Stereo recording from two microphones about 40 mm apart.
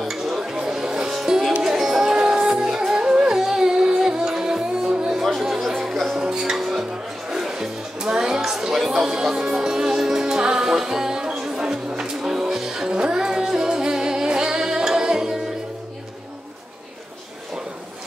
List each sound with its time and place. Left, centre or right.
0.0 s dishes: centre
1.6 s music: centre
5.9 s music: centre
6.1 s music: centre
6.5 s music: centre